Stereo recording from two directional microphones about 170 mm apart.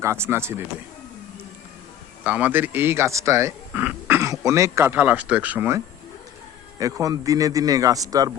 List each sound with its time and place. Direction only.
0.0 s speech: 15° right (ahead or behind)
2.2 s a man's voice: 10° right (ahead or behind)